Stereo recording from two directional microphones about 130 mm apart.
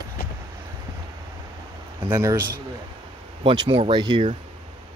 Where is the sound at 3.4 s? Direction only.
40° right (ahead or behind).